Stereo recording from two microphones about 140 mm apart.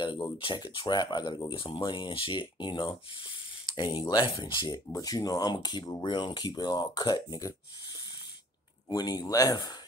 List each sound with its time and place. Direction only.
0.4 s speech: 35° left (ahead or behind)
8.8 s speech: 30° left (ahead or behind)